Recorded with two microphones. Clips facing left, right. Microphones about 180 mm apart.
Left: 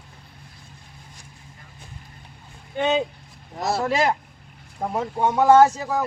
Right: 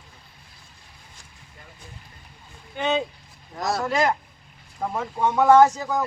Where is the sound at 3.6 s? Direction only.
25° left (ahead or behind).